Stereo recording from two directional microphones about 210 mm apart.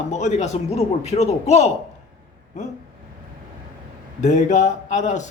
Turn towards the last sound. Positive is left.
turn(degrees=35)  # may be behind; listen again after turning